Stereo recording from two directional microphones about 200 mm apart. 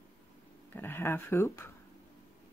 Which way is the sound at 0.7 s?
10° left (ahead or behind).